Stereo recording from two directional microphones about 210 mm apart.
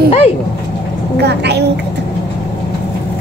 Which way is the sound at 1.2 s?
50° right (ahead or behind).